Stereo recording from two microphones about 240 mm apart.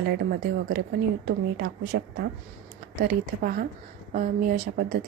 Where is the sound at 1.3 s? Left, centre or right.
Right.